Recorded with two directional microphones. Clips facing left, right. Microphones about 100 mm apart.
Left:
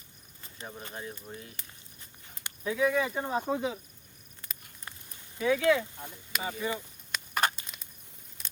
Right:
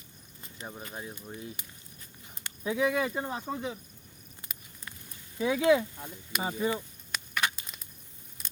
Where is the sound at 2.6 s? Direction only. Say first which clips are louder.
Even; 20° right (ahead or behind).